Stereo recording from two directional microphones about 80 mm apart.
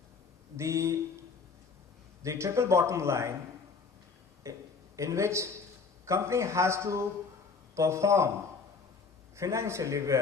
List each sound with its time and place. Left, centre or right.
0.5 s a man's voice: right
2.2 s a man's voice: right
4.4 s a man's voice: right
9.3 s a man's voice: right